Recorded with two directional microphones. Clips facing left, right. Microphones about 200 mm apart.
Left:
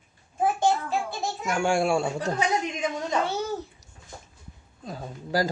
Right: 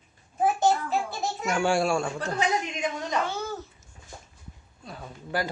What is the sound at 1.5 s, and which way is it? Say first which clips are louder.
Speech: left 1 dB; 10° left (ahead or behind).